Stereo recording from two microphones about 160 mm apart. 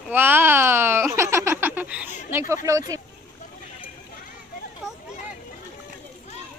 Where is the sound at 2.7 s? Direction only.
20° right (ahead or behind).